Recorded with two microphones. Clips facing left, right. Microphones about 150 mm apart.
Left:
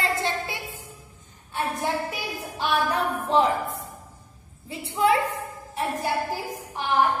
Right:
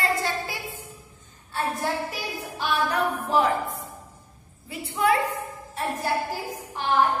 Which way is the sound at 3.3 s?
25° left (ahead or behind).